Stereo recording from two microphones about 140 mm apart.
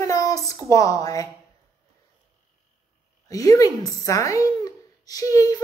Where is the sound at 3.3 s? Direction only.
25° left (ahead or behind).